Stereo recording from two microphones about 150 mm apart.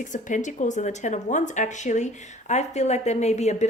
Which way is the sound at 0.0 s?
55° left (ahead or behind).